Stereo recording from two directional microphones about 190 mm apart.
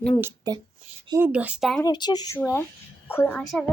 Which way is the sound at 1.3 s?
5° right (ahead or behind).